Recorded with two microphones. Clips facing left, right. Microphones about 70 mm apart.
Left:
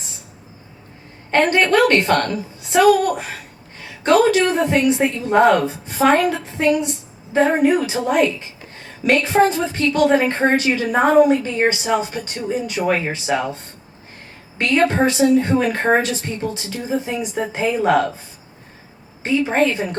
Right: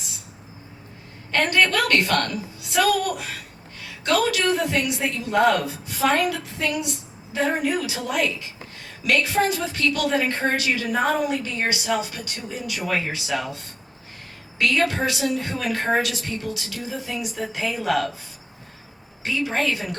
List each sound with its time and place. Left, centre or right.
1.3 s a woman's voice: left
14.6 s a woman's voice: left
19.2 s a woman's voice: left